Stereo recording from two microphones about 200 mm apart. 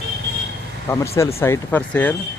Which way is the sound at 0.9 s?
15° left (ahead or behind).